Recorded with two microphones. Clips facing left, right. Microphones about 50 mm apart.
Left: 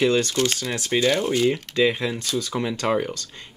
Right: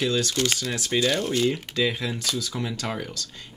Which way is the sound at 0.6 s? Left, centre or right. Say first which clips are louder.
Left 3 dB; left.